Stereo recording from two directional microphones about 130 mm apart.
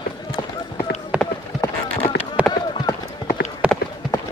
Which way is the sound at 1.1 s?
10° right (ahead or behind).